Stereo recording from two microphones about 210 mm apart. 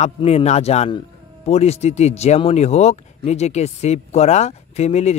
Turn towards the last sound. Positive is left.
turn(degrees=30)  # may be behind; listen again after turning